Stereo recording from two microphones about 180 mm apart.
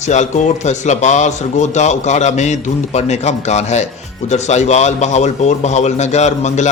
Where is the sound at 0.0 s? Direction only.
40° left (ahead or behind).